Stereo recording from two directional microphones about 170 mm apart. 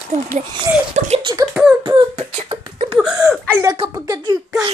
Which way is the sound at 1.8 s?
35° right (ahead or behind).